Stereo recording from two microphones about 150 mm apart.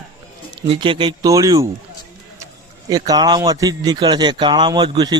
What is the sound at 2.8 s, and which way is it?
A man's voice, 25° right (ahead or behind).